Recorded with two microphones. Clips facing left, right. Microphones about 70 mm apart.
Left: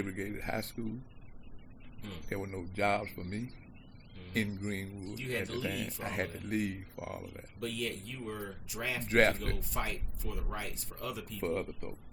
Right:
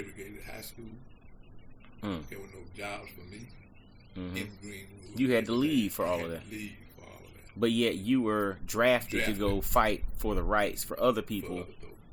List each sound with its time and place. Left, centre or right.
0.1 s a man's voice: left
2.0 s a man's voice: right
2.3 s a man's voice: left
5.1 s speech: right
6.4 s a man's voice: left
7.6 s speech: right
9.0 s a man's voice: left
9.6 s speech: right
11.3 s a man's voice: left